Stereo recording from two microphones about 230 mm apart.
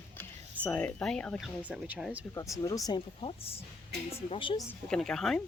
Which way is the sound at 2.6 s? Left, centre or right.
Centre.